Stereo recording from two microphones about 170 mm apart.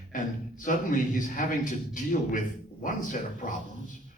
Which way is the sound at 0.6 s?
50° left (ahead or behind).